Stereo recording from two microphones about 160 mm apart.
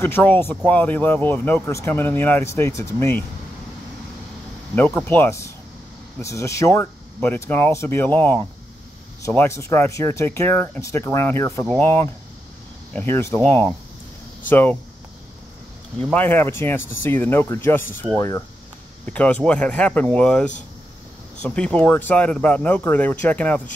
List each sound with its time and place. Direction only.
0.0 s speech: 10° left (ahead or behind)
4.7 s speech: 10° left (ahead or behind)
16.1 s speech: 10° left (ahead or behind)